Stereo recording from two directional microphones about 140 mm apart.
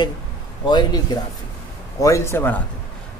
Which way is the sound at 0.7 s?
30° left (ahead or behind).